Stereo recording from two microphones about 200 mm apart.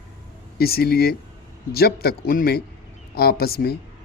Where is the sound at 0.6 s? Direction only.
50° left (ahead or behind).